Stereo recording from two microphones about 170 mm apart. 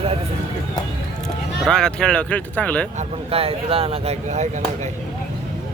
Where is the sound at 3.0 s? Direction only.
35° right (ahead or behind).